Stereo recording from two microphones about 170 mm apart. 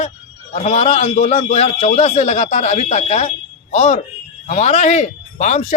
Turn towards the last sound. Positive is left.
turn(degrees=40)  # may be behind; listen again after turning